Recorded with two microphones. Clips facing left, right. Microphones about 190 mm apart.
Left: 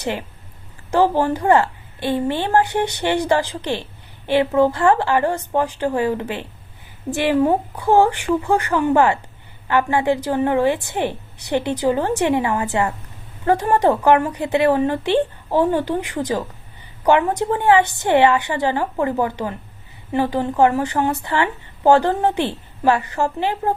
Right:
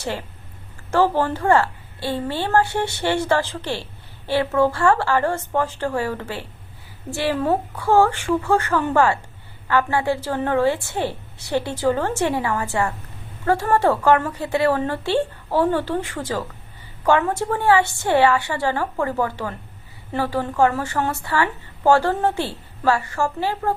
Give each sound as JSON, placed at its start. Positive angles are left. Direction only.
{"t": 0.0, "sound": "a woman's voice", "side_deg": 15}